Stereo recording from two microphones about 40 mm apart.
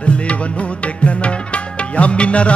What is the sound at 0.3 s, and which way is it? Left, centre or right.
Music, left.